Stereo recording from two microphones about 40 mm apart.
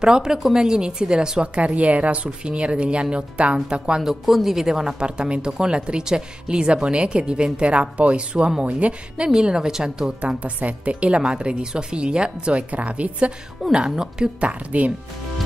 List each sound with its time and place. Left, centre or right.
0.0 s speech: centre
1.4 s a woman's voice: right
4.0 s a woman's voice: centre; by 9.3 s right
9.3 s speech: centre
10.2 s a woman's voice: right
11.2 s speech: centre
12.7 s a woman's voice: right
13.8 s speech: centre
14.7 s a woman's voice: right